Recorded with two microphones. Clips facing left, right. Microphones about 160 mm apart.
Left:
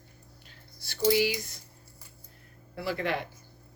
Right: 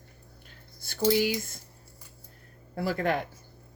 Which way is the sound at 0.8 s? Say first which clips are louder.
Even; 50° right (ahead or behind).